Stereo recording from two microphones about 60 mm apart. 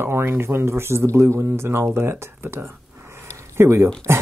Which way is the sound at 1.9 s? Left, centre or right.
Right.